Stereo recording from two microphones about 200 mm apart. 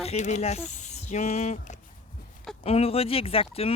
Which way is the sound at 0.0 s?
35° left (ahead or behind).